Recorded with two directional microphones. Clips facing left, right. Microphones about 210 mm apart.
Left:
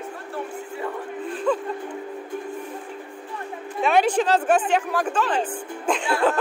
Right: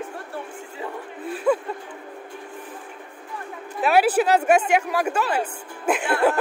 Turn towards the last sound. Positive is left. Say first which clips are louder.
# right 1 dB
turn(degrees=-5)  # may be behind; listen again after turning